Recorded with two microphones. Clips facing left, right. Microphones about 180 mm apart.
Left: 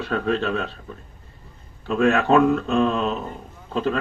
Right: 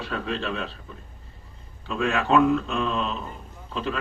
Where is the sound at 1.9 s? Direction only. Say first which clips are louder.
Left 5 dB; 45° left (ahead or behind).